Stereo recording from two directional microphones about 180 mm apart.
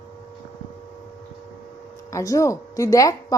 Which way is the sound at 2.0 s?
15° left (ahead or behind).